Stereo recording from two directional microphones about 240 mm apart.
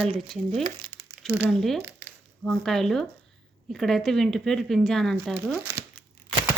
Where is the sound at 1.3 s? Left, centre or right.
Centre.